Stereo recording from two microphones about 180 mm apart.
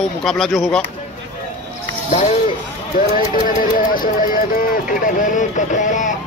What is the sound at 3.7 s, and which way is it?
Speech, 50° left (ahead or behind).